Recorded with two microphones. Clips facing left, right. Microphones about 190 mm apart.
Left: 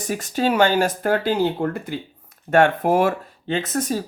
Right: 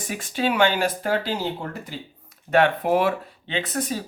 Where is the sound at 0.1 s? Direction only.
40° left (ahead or behind).